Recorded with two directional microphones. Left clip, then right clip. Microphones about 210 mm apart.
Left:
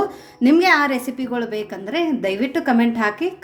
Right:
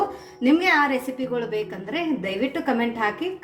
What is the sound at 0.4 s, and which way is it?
A woman's voice, 50° left (ahead or behind).